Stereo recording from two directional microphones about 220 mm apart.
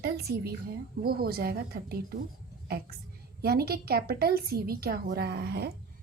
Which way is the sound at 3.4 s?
45° right (ahead or behind).